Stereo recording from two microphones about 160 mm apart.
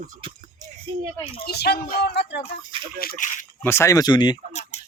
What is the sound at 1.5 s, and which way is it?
Speech, 90° left.